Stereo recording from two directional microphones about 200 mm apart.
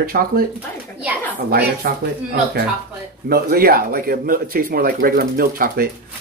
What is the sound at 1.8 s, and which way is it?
Speech, 50° right (ahead or behind).